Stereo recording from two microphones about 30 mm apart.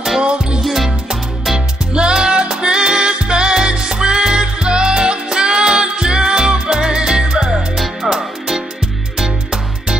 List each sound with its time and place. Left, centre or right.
0.2 s music: right
0.6 s music: centre
2.0 s music: right
8.1 s music: centre